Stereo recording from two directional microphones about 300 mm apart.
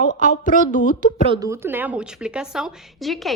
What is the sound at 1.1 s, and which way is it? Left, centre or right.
A woman's voice, centre.